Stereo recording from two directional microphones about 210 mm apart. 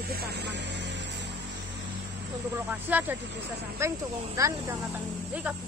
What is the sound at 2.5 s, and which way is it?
Speech, 10° right (ahead or behind).